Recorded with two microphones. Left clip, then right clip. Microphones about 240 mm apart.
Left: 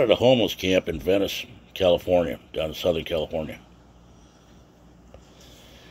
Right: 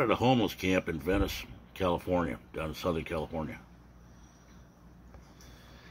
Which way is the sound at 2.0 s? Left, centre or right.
Centre.